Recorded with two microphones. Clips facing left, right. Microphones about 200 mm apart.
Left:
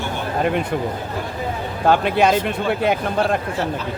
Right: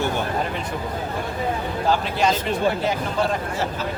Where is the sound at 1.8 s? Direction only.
60° left (ahead or behind).